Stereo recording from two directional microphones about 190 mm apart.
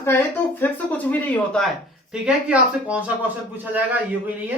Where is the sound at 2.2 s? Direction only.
5° right (ahead or behind).